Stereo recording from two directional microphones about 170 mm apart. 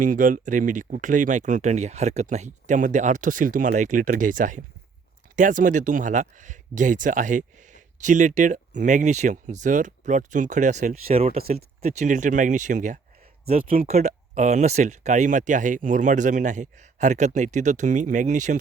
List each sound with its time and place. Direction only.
0.0 s speech: 50° right (ahead or behind)
13.8 s speech: 40° right (ahead or behind)